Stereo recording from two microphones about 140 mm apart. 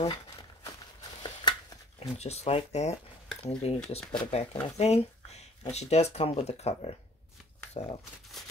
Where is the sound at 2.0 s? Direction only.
50° left (ahead or behind).